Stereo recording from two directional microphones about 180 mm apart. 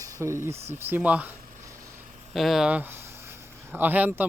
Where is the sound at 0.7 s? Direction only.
10° right (ahead or behind).